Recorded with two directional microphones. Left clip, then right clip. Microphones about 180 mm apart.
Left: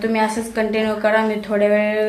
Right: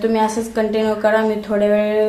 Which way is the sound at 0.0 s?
10° right (ahead or behind).